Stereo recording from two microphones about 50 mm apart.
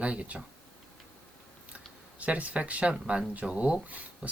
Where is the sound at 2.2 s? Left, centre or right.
Right.